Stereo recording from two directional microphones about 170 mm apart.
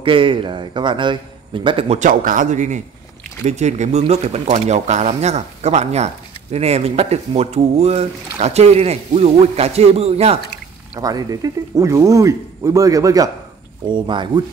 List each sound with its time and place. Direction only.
0.0 s speech: 30° right (ahead or behind)
2.0 s a man's voice: 50° right (ahead or behind)
11.0 s speech: 20° right (ahead or behind)